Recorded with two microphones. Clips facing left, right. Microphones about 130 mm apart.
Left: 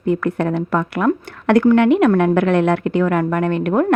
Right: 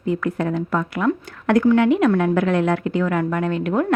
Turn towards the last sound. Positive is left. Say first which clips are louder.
# left 4 dB
turn(degrees=55)  # may be behind; listen again after turning